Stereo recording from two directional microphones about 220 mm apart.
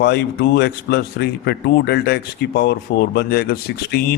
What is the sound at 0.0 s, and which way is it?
A man's voice, 50° left (ahead or behind).